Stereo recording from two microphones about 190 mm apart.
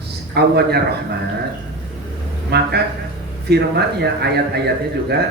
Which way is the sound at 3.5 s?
60° right (ahead or behind).